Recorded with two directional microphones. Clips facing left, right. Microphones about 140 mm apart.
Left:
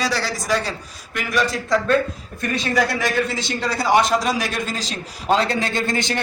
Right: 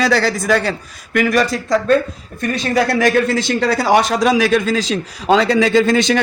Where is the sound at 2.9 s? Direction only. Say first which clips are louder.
Right 8 dB; 65° right (ahead or behind); by 6.2 s 90° right.